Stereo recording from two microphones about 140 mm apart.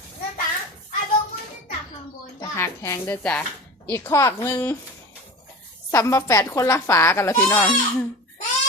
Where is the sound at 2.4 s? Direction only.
20° left (ahead or behind).